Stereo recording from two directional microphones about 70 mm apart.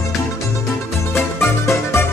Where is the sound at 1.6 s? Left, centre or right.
Left.